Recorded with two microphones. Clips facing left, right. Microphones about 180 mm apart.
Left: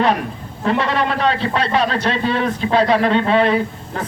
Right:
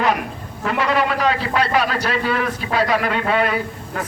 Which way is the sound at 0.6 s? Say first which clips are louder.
Left 1 dB; 30° left (ahead or behind).